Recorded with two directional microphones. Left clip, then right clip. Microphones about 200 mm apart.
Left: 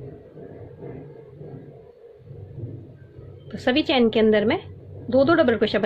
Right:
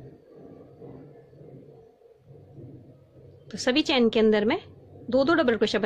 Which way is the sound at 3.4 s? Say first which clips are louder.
Left 3 dB; 50° right (ahead or behind).